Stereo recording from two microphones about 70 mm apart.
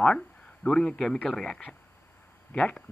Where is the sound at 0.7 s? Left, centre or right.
Centre.